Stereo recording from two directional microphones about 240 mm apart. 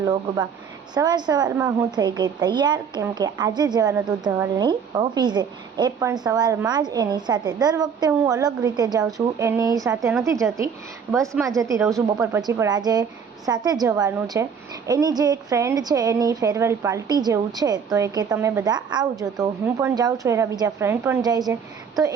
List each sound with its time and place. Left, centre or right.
0.0 s a woman's voice: centre